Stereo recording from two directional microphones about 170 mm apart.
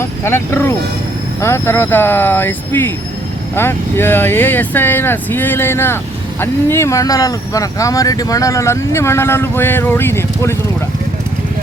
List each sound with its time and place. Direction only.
0.0 s speech: 15° left (ahead or behind)